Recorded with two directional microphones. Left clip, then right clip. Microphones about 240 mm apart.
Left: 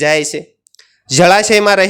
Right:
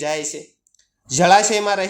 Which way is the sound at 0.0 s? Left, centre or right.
Left.